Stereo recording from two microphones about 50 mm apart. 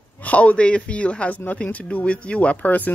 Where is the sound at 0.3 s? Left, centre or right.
Left.